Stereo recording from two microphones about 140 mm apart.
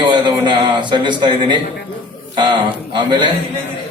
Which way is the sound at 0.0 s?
35° right (ahead or behind).